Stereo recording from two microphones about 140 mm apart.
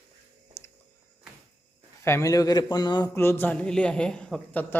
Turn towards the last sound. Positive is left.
turn(degrees=10)  # may be behind; listen again after turning